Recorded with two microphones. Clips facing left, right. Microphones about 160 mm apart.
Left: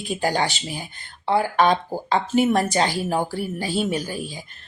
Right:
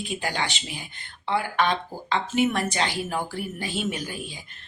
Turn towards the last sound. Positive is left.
turn(degrees=35)  # may be behind; listen again after turning